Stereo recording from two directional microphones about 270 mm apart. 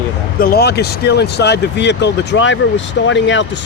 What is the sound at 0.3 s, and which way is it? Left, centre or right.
Speech, left.